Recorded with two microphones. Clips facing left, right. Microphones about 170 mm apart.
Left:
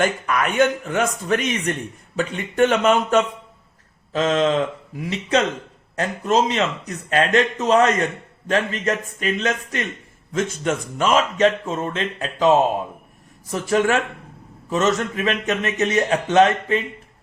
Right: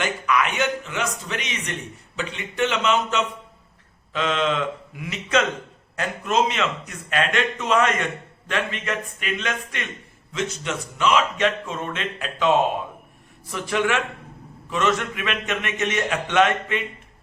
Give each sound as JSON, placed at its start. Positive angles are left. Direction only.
{"t": 0.0, "sound": "speech", "side_deg": 45}